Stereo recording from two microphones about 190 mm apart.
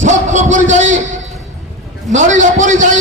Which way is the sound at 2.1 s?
40° right (ahead or behind).